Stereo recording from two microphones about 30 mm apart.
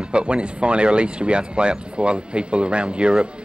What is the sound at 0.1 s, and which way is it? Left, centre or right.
Speech, right.